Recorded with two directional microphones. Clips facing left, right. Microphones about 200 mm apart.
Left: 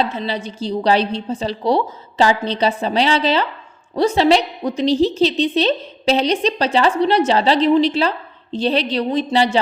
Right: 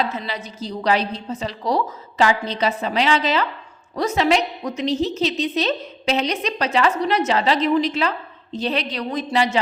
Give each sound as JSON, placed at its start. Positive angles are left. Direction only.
{"t": 0.0, "sound": "a woman's voice", "side_deg": 30}